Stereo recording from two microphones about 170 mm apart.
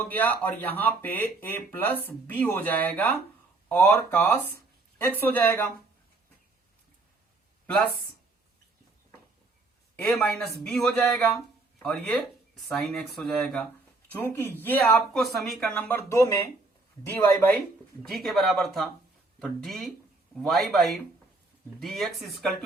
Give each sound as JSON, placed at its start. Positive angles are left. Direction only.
{"t": 0.0, "sound": "speech", "side_deg": 10}
{"t": 9.9, "sound": "speech", "side_deg": 5}
{"t": 18.1, "sound": "speech", "side_deg": 0}